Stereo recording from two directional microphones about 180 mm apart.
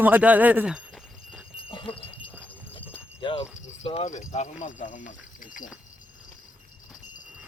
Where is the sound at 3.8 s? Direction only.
35° left (ahead or behind).